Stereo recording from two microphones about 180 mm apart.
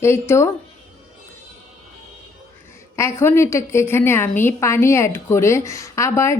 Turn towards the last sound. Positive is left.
turn(degrees=15)  # may be behind; listen again after turning